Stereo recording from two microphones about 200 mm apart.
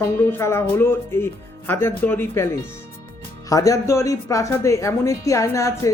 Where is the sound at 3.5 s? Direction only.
15° left (ahead or behind).